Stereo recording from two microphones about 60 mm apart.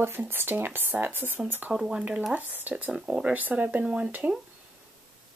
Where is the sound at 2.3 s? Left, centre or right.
Right.